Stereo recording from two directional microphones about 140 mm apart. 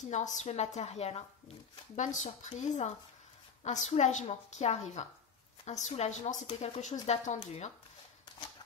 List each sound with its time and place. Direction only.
0.1 s a woman's voice: 60° left (ahead or behind)
2.0 s a woman's voice: 60° left (ahead or behind)